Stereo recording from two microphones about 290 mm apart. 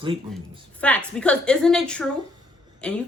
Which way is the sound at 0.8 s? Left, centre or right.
Centre.